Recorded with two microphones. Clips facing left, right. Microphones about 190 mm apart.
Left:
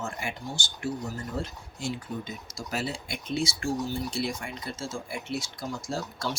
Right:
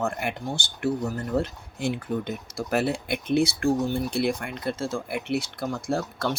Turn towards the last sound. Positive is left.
turn(degrees=-60)  # may be behind; listen again after turning